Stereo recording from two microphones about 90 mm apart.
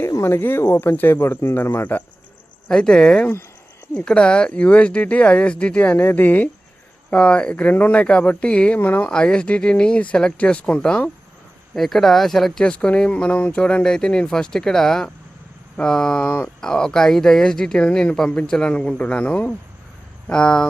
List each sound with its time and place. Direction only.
0.1 s speech: 30° left (ahead or behind)
2.6 s speech: 10° left (ahead or behind)
9.0 s speech: 10° left (ahead or behind)
11.7 s speech: centre (ahead or behind)